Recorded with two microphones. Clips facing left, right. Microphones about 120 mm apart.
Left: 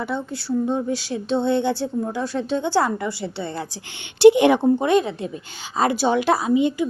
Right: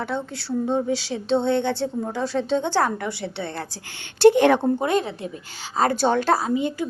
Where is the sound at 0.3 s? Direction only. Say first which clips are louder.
Left 1 dB; centre (ahead or behind).